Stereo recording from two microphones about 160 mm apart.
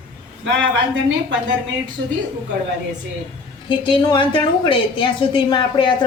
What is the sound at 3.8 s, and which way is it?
A woman's voice, 30° left (ahead or behind).